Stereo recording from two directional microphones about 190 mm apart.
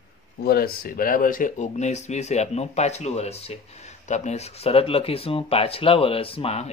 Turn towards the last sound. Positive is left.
turn(degrees=30)  # may be behind; listen again after turning